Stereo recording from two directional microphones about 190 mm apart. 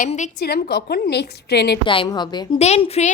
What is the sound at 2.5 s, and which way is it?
Speech, 35° left (ahead or behind).